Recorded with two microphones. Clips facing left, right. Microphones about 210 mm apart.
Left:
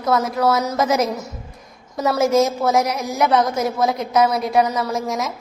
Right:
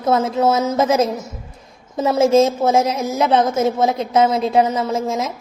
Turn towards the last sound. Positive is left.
turn(degrees=-25)  # may be behind; listen again after turning